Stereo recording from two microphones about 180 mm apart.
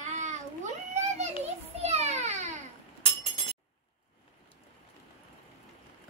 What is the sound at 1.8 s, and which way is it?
Children playing, 35° right (ahead or behind).